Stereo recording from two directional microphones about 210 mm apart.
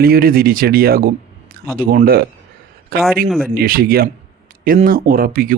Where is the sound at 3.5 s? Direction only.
45° right (ahead or behind).